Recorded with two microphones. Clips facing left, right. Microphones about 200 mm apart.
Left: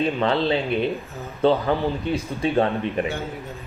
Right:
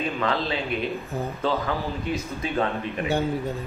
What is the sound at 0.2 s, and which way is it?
A man's voice, 30° left (ahead or behind).